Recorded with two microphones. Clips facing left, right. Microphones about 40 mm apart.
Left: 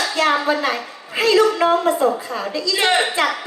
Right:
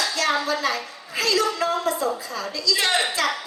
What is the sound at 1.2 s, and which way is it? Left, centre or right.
A woman's voice, left.